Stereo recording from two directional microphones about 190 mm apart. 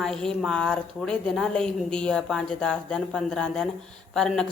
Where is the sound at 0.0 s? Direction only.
5° left (ahead or behind).